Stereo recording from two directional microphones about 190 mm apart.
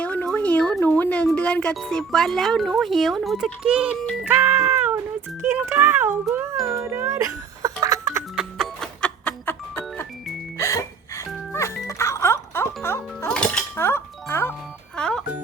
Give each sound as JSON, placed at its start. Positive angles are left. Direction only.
{"t": 0.0, "sound": "speech", "side_deg": 10}
{"t": 4.0, "sound": "music", "side_deg": -5}
{"t": 5.4, "sound": "a child's voice", "side_deg": -10}
{"t": 6.2, "sound": "music", "side_deg": -10}
{"t": 6.7, "sound": "a sound", "side_deg": -15}
{"t": 8.4, "sound": "music", "side_deg": 0}